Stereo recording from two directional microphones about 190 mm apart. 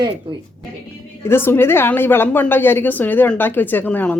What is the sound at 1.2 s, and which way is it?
A woman's voice, 10° left (ahead or behind).